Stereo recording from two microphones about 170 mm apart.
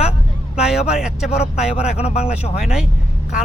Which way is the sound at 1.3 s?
40° left (ahead or behind).